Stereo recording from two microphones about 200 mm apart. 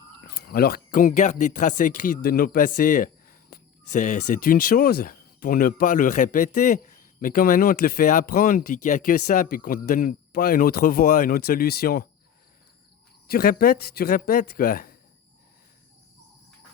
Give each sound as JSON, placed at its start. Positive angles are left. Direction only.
{"t": 0.3, "sound": "speech", "side_deg": 50}
{"t": 13.2, "sound": "speech", "side_deg": 50}